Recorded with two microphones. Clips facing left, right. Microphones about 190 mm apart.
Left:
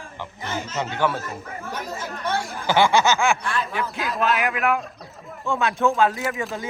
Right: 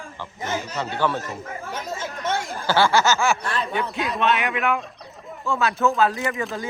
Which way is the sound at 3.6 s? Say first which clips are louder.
Right 2 dB; centre (ahead or behind).